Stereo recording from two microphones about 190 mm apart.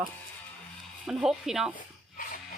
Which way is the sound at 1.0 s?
5° right (ahead or behind).